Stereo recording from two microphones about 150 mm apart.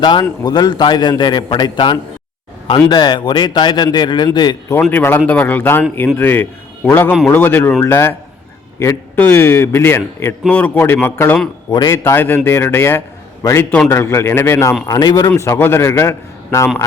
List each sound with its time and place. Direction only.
0.0 s a man's voice: 30° left (ahead or behind)
4.8 s a man's voice: 10° left (ahead or behind)
11.7 s a man's voice: 25° left (ahead or behind)